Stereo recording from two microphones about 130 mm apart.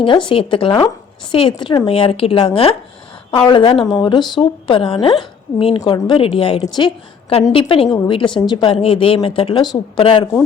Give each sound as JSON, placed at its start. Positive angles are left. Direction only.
{"t": 0.0, "sound": "a woman's voice", "side_deg": 40}
{"t": 6.7, "sound": "a woman's voice", "side_deg": 35}
{"t": 8.7, "sound": "speech", "side_deg": 50}